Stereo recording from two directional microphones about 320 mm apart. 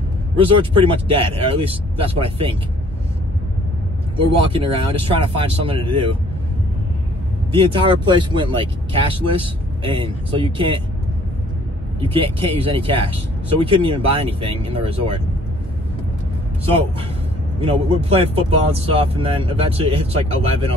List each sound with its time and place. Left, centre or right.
0.4 s speech: centre
4.5 s speech: centre
7.5 s speech: centre
12.0 s speech: centre
17.6 s speech: centre